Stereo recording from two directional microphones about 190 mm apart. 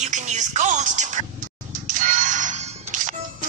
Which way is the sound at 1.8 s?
45° right (ahead or behind).